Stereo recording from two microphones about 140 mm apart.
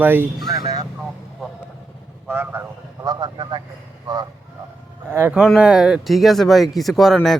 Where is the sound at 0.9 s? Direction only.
Centre (ahead or behind).